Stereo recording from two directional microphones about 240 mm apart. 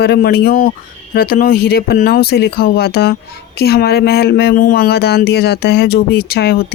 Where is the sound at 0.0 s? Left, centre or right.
Left.